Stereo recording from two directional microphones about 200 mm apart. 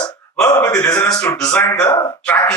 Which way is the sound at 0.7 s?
5° left (ahead or behind).